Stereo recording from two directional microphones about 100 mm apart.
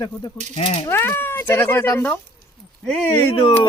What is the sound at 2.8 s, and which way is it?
Speech, 10° left (ahead or behind).